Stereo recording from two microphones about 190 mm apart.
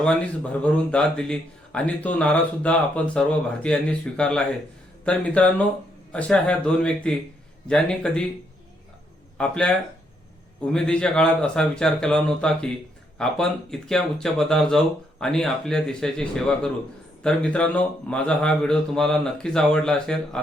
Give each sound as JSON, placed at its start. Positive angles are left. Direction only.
{"t": 0.6, "sound": "speech", "side_deg": 5}
{"t": 9.4, "sound": "speech", "side_deg": 5}